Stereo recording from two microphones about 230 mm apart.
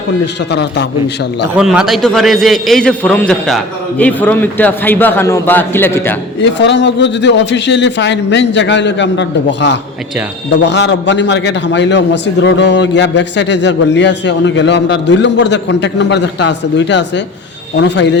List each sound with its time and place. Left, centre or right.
0.5 s a man's voice: left
1.5 s a man's voice: centre
6.4 s a man's voice: left